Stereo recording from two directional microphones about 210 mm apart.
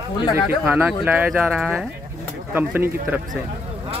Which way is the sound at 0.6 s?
10° right (ahead or behind).